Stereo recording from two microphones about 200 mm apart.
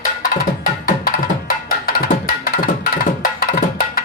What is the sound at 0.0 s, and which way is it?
Music, 45° left (ahead or behind).